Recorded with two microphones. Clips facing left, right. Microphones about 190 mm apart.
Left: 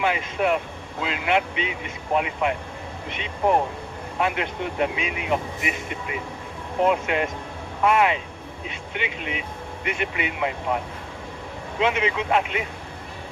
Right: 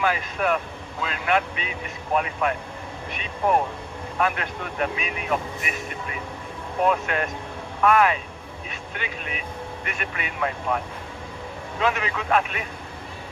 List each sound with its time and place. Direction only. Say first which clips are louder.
0.0 s speech: left 1 dB; 20° left (ahead or behind)
4.2 s speech: left 1 dB; 20° left (ahead or behind)
11.8 s speech: left 3 dB; 20° left (ahead or behind)